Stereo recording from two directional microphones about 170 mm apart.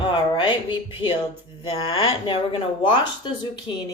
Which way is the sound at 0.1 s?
30° left (ahead or behind).